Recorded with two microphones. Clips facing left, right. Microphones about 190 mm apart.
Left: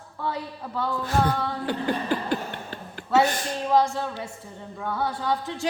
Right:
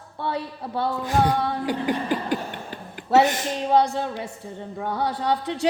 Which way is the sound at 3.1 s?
20° right (ahead or behind).